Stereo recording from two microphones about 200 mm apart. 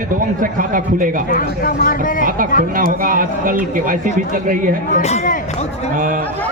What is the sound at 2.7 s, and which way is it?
Speech, 45° right (ahead or behind).